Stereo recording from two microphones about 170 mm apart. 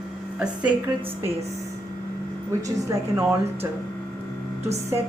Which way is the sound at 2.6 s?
20° right (ahead or behind).